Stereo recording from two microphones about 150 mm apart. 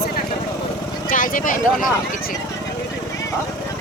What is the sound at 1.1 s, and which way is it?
Speech, 65° left (ahead or behind).